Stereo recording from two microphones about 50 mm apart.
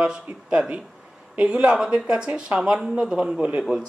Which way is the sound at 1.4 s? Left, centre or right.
Right.